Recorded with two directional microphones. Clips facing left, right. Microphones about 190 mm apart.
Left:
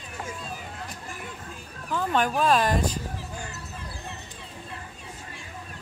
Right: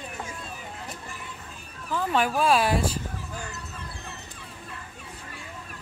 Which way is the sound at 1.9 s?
5° right (ahead or behind).